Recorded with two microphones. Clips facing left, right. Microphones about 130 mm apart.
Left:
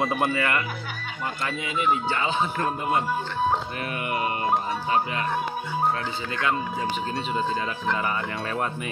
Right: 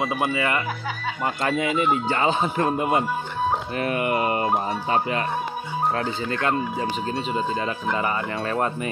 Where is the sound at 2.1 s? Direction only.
45° right (ahead or behind).